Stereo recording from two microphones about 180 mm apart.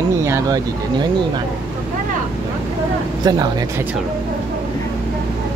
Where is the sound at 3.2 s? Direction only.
20° right (ahead or behind).